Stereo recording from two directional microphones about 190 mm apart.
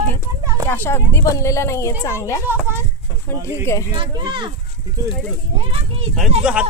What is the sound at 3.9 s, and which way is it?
Speech, 25° right (ahead or behind).